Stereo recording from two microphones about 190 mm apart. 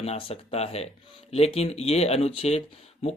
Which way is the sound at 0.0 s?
30° left (ahead or behind).